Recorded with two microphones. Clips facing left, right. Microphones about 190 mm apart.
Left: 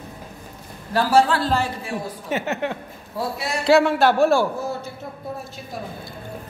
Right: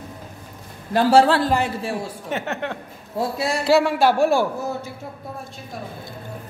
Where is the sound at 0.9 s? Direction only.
30° right (ahead or behind).